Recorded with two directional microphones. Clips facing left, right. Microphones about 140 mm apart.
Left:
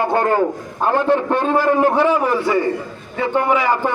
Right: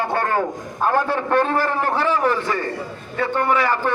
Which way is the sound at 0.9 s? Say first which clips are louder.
Left 3 dB; 20° left (ahead or behind).